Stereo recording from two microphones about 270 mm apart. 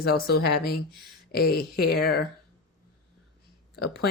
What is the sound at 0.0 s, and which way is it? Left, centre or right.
Speech, left.